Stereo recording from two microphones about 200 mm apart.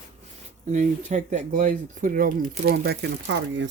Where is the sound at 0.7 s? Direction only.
35° right (ahead or behind).